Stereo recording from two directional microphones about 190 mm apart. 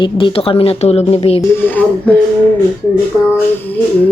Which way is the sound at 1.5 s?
10° left (ahead or behind).